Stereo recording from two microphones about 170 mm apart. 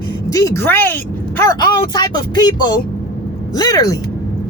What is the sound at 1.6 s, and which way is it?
Speech, 25° left (ahead or behind).